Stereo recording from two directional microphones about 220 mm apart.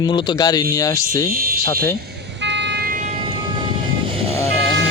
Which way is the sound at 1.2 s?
40° right (ahead or behind).